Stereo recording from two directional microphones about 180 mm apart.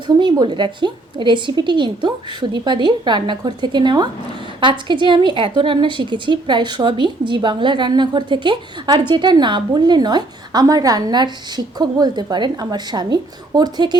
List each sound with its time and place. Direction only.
0.2 s a woman's voice: 25° right (ahead or behind)